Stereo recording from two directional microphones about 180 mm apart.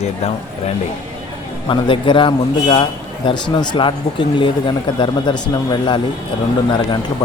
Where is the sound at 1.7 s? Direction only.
30° left (ahead or behind).